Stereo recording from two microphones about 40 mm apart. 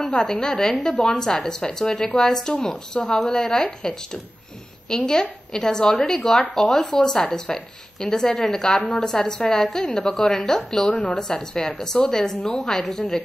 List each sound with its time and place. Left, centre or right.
0.2 s a woman's voice: centre